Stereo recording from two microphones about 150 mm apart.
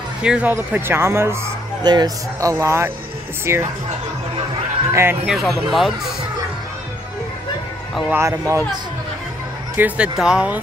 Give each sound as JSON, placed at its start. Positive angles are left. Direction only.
{"t": 0.2, "sound": "speech", "side_deg": -10}
{"t": 4.9, "sound": "speech", "side_deg": -15}
{"t": 5.3, "sound": "speech", "side_deg": 0}
{"t": 8.1, "sound": "speech", "side_deg": -20}
{"t": 9.8, "sound": "speech", "side_deg": -10}